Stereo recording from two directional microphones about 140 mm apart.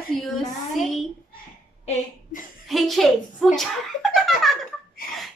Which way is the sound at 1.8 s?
60° left (ahead or behind).